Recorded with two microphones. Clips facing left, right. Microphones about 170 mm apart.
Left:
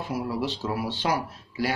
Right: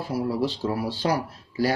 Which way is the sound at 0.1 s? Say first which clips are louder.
Right 4 dB; 40° right (ahead or behind).